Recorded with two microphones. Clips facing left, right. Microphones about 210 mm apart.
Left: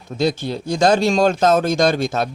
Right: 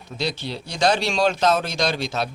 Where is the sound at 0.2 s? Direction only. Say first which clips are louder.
Left 8 dB; 50° left (ahead or behind).